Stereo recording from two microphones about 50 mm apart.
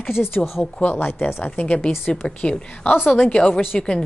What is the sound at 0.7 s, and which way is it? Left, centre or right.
A woman's voice, left.